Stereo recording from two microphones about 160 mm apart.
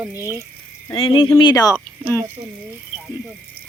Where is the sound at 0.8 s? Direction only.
30° left (ahead or behind).